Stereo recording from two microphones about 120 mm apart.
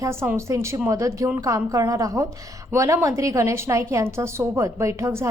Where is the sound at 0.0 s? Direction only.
20° right (ahead or behind).